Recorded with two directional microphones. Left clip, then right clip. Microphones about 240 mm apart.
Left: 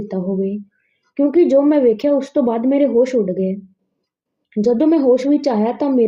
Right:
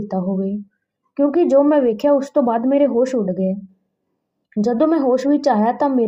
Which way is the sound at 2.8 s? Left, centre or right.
Right.